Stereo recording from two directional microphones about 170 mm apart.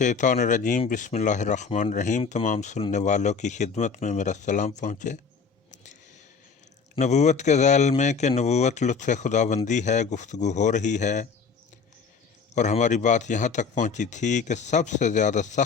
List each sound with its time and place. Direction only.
0.0 s speech: 45° left (ahead or behind)
5.7 s a sound: 45° left (ahead or behind)
6.9 s speech: 40° left (ahead or behind)
12.5 s speech: 45° left (ahead or behind)